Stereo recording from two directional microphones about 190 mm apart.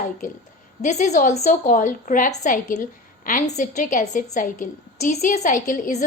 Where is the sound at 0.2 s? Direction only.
45° left (ahead or behind).